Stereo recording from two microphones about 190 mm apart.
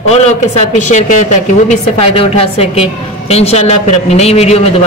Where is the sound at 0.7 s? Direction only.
40° left (ahead or behind).